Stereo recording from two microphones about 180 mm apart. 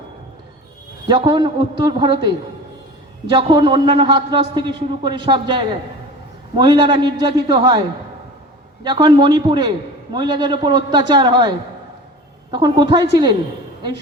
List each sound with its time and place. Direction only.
1.0 s a man's voice: 25° right (ahead or behind)
3.3 s a man's voice: 25° right (ahead or behind)